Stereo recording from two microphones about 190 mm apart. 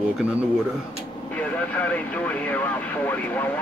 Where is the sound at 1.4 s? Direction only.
10° left (ahead or behind).